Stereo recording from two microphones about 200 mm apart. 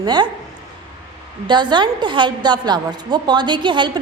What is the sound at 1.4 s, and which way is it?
A woman's voice, 20° right (ahead or behind).